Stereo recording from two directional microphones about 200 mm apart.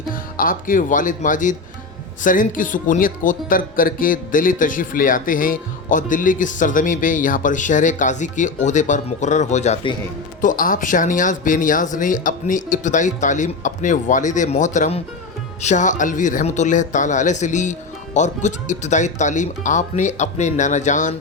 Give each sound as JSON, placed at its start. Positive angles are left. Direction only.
{"t": 0.1, "sound": "speech", "side_deg": 45}